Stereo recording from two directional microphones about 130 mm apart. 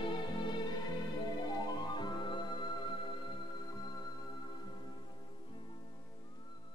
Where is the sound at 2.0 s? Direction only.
35° left (ahead or behind).